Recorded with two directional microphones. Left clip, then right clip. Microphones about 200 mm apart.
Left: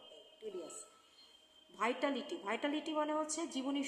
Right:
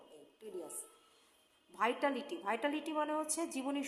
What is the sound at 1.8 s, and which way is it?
A woman's voice, 15° right (ahead or behind).